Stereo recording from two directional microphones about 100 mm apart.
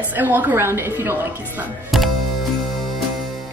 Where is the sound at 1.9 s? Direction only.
Centre (ahead or behind).